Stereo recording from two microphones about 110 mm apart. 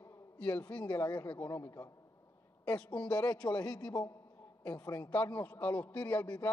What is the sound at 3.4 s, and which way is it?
Speech, 35° left (ahead or behind).